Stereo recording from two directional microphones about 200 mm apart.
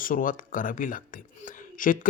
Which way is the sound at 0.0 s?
45° left (ahead or behind).